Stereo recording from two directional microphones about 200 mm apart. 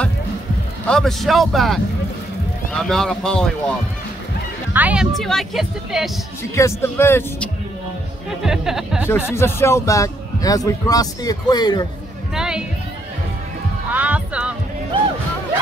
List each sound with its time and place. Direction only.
0.8 s a woman's voice: centre (ahead or behind)
4.7 s a woman's voice: 5° right (ahead or behind)
6.5 s a man's voice: 15° left (ahead or behind)
8.3 s a woman's voice: centre (ahead or behind)
9.3 s a man's voice: 10° left (ahead or behind)
12.4 s music: 5° right (ahead or behind)
13.9 s speech: 5° right (ahead or behind)